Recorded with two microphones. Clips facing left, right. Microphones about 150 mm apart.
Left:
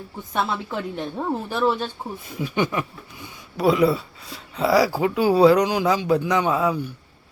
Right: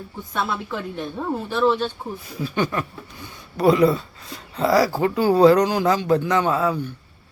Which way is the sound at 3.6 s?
Centre (ahead or behind).